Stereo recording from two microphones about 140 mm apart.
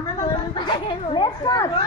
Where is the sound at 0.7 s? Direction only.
35° left (ahead or behind).